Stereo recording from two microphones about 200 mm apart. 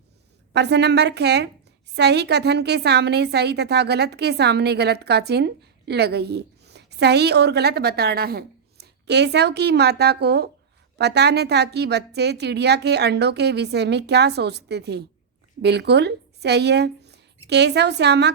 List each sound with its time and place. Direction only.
0.5 s a woman's voice: 55° right (ahead or behind)